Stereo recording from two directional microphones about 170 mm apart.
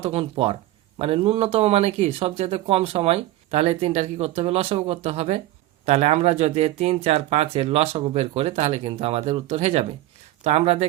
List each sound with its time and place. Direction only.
0.0 s speech: 35° right (ahead or behind)